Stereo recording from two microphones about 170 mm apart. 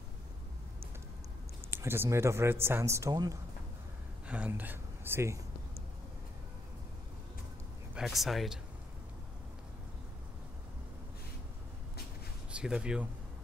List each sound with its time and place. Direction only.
1.7 s speech: 15° right (ahead or behind)
4.3 s a sound: 10° right (ahead or behind)
7.9 s speech: centre (ahead or behind)
12.4 s speech: 5° right (ahead or behind)